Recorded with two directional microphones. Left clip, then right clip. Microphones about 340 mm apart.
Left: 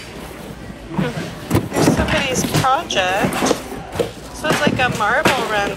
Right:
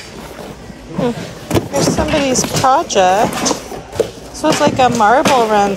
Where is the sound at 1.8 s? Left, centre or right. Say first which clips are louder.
Right 1 dB; centre.